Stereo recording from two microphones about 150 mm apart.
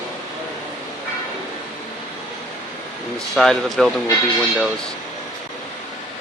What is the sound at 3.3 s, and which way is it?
Speech, centre (ahead or behind).